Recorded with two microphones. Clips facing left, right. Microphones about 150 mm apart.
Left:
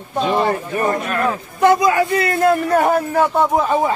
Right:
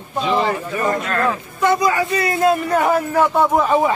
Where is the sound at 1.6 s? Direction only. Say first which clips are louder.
Left 4 dB; 60° left (ahead or behind).